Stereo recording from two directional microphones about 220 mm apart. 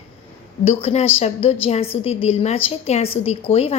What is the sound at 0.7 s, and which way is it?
A woman's voice, 25° left (ahead or behind).